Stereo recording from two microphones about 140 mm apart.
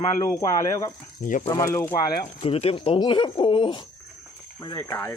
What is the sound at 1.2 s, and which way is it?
Speech, 70° left (ahead or behind).